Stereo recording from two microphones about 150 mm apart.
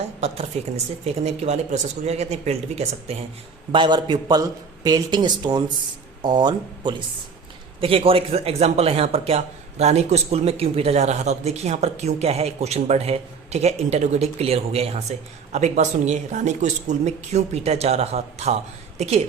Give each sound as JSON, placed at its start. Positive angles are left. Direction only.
{"t": 0.5, "sound": "speech", "side_deg": -45}
{"t": 3.7, "sound": "speech", "side_deg": -30}